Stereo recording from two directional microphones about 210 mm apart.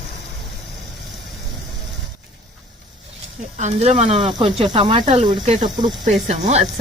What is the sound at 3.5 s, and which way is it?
Speech, 30° right (ahead or behind).